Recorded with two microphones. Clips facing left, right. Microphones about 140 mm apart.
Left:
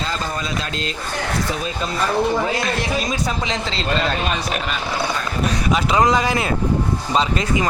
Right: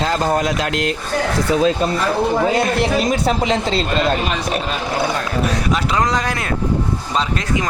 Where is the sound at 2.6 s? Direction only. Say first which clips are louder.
Right 5 dB; 55° right (ahead or behind).